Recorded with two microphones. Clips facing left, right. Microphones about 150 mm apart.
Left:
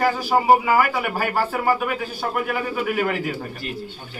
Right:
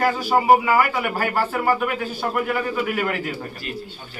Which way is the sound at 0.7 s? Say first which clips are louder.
Even; 5° left (ahead or behind).